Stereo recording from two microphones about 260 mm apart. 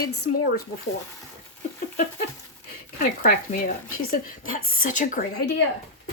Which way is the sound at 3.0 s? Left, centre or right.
Left.